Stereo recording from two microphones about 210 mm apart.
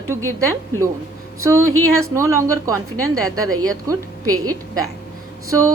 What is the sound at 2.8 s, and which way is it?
Speech, 90° right.